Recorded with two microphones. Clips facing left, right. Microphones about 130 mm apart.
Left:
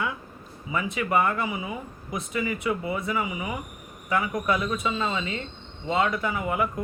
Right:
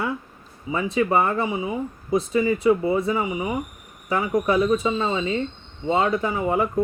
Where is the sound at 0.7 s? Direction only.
30° right (ahead or behind).